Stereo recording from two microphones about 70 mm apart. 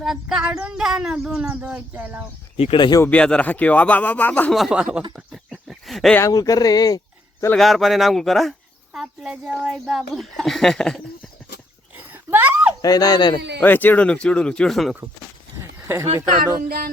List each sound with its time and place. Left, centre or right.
0.0 s speech: centre; by 2.2 s right
2.7 s speech: left
3.1 s speech: centre
4.7 s speech: centre
5.3 s a sound: centre
6.2 s speech: left
7.5 s speech: centre
12.1 s a sound: right
12.8 s speech: left
13.6 s speech: left
14.7 s speech: centre
16.0 s speech: right